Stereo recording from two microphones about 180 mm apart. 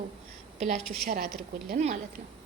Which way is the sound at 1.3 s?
Centre (ahead or behind).